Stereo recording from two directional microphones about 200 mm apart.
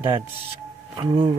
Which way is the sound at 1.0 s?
20° right (ahead or behind).